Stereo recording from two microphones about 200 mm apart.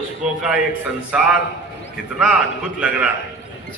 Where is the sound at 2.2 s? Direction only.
5° right (ahead or behind).